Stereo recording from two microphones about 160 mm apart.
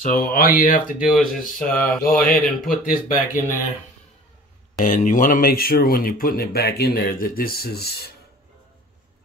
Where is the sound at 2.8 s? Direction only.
60° left (ahead or behind).